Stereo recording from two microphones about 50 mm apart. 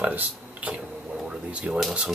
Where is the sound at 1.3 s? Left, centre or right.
Right.